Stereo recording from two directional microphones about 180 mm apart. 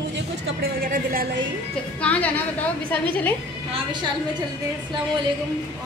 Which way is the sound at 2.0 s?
10° left (ahead or behind).